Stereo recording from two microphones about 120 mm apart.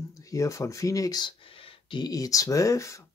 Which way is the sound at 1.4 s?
50° left (ahead or behind).